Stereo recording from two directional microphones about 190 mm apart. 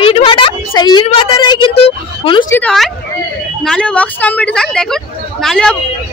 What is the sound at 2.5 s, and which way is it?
A woman's voice, 5° left (ahead or behind).